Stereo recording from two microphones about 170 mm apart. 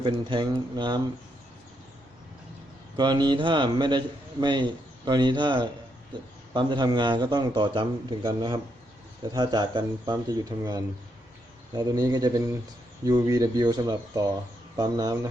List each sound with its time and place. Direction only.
0.0 s a man's voice: 30° right (ahead or behind)
2.9 s a man's voice: 25° right (ahead or behind)